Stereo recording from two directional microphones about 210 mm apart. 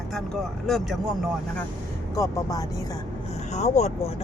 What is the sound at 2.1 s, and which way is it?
Speech, 15° left (ahead or behind).